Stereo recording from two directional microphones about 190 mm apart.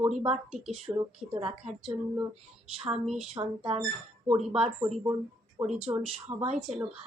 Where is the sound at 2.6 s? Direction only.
30° right (ahead or behind).